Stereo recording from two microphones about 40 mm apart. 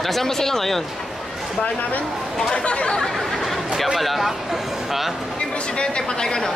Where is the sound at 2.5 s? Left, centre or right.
Left.